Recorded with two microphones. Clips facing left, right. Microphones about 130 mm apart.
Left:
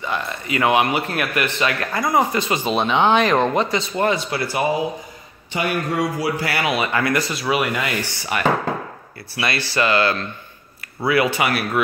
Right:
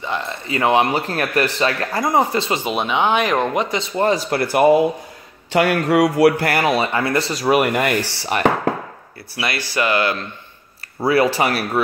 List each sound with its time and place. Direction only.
0.0 s speech: 20° right (ahead or behind)
2.6 s speech: 10° right (ahead or behind); by 4.4 s 40° right (ahead or behind)
4.4 s speech: 55° right (ahead or behind)
5.5 s speech: 85° right; by 6.9 s 40° right (ahead or behind)
6.9 s speech: 30° right (ahead or behind)
7.4 s speech: 50° right (ahead or behind)
8.0 s speech: 40° right (ahead or behind)
9.8 s speech: 20° right (ahead or behind)
11.1 s speech: 35° right (ahead or behind)